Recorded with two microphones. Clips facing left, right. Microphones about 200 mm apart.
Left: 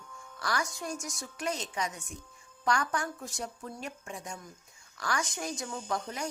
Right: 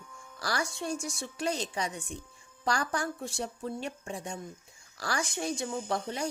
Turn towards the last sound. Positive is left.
turn(degrees=-30)  # may be behind; listen again after turning